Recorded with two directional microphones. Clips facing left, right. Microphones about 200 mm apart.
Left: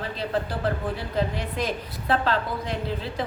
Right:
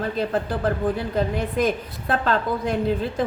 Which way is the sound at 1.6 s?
50° right (ahead or behind).